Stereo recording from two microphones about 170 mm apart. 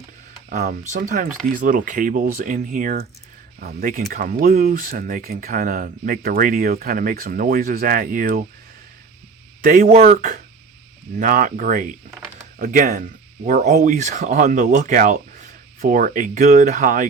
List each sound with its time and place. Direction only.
0.5 s speech: 50° right (ahead or behind)
9.6 s speech: 55° right (ahead or behind)